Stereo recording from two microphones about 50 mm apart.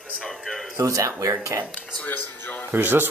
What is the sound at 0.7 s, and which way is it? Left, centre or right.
Speech, right.